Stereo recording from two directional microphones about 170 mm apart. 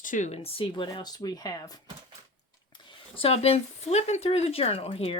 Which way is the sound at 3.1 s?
35° left (ahead or behind).